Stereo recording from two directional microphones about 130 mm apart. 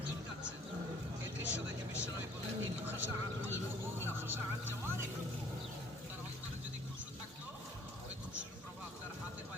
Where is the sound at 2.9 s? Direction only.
15° right (ahead or behind).